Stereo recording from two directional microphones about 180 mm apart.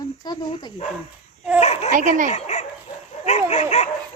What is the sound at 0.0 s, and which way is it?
Dog, 20° left (ahead or behind).